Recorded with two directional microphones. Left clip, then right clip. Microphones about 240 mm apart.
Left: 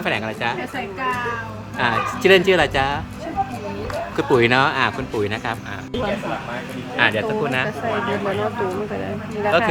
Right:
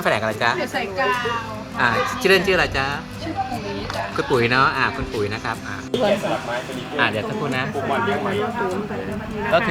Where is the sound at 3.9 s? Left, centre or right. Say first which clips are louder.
Left 2 dB; centre.